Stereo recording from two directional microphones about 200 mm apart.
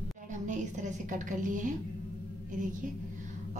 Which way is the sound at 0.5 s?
40° right (ahead or behind).